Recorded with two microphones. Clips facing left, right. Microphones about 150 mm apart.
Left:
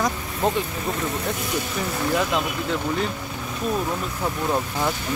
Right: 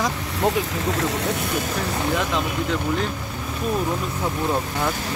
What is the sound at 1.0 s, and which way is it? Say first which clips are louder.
Speech: right 3 dB; 85° right.